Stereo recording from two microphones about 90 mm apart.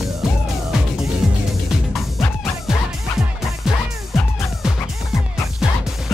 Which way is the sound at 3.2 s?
5° right (ahead or behind).